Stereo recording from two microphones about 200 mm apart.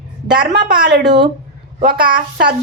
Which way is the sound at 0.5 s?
55° right (ahead or behind).